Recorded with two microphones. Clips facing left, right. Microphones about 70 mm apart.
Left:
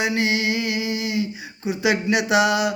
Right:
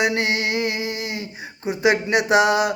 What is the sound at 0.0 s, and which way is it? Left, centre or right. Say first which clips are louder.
Speech: right 1 dB; right.